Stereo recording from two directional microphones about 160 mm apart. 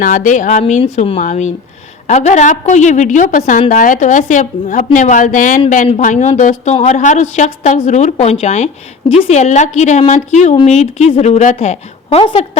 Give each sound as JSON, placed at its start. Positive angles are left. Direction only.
{"t": 0.0, "sound": "a woman's voice", "side_deg": 55}